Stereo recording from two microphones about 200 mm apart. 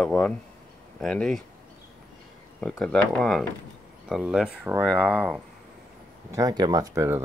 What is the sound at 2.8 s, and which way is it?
Speech, centre (ahead or behind).